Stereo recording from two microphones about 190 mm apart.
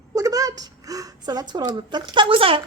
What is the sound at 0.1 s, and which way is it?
A woman's voice, 20° right (ahead or behind).